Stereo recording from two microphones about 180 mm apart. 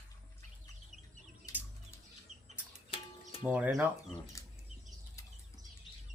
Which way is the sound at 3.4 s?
5° right (ahead or behind).